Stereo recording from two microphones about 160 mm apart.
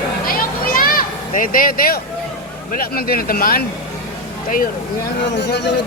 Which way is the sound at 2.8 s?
70° left (ahead or behind).